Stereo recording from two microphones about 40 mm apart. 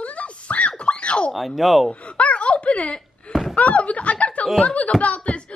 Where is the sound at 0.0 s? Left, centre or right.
Left.